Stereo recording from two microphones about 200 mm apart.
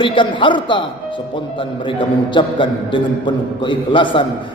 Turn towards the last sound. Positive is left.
turn(degrees=25)  # may be behind; listen again after turning